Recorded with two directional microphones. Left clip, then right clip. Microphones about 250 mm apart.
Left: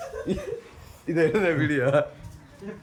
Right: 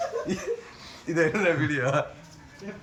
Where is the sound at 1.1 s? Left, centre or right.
Centre.